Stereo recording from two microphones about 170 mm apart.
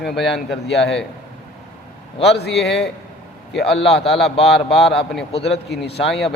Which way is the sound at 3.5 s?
Centre (ahead or behind).